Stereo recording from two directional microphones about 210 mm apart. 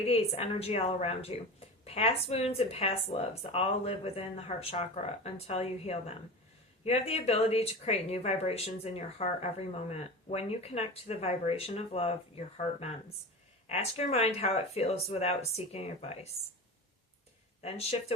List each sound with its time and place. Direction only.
0.1 s speech: 30° left (ahead or behind)
17.6 s speech: 30° left (ahead or behind)